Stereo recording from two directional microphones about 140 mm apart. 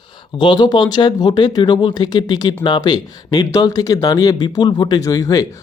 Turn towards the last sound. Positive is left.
turn(degrees=25)  # may be behind; listen again after turning